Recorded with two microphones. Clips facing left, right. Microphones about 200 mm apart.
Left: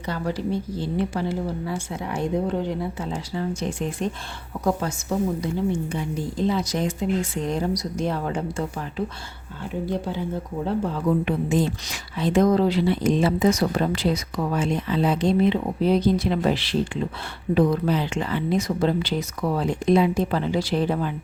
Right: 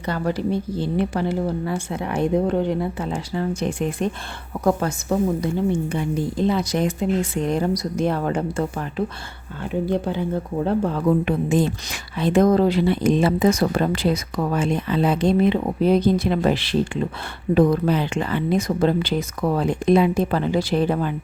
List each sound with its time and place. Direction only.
0.1 s a woman's voice: 60° right (ahead or behind)
5.1 s a woman's voice: 55° right (ahead or behind)
10.7 s a woman's voice: 55° right (ahead or behind)